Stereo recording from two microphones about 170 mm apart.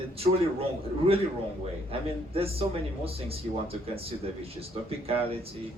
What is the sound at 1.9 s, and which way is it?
Speech, 35° right (ahead or behind).